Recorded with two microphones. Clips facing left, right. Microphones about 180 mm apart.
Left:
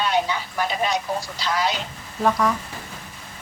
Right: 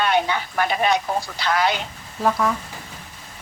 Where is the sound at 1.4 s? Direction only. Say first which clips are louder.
Right 3 dB; 60° right (ahead or behind).